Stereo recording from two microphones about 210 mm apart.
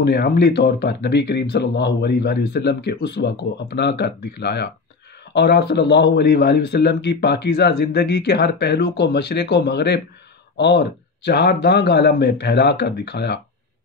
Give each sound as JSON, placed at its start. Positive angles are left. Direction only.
{"t": 0.0, "sound": "a man's voice", "side_deg": 50}